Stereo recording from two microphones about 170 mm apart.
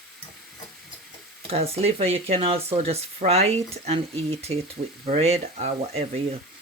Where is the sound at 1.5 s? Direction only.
35° right (ahead or behind).